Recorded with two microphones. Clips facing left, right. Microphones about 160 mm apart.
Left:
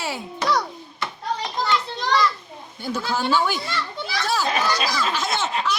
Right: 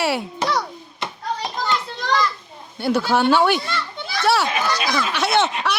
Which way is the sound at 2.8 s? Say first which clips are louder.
Right 7 dB; 70° right (ahead or behind).